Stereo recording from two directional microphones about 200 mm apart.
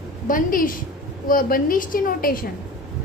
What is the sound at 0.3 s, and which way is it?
A woman's voice, 45° left (ahead or behind).